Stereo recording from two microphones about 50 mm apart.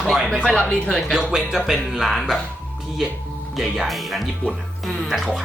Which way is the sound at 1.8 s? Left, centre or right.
Centre.